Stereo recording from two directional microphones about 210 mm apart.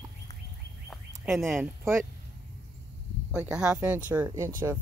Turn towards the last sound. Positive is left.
turn(degrees=-15)  # may be behind; listen again after turning